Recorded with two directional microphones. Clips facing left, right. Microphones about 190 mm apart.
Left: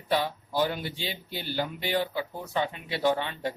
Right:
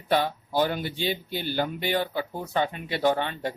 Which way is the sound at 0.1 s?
50° right (ahead or behind).